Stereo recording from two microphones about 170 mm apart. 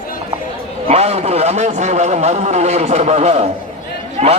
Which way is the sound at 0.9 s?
40° right (ahead or behind).